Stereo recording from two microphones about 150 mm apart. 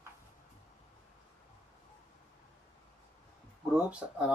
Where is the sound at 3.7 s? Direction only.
10° right (ahead or behind).